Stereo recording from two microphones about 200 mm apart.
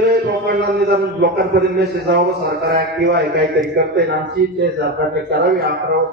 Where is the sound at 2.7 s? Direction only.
55° right (ahead or behind).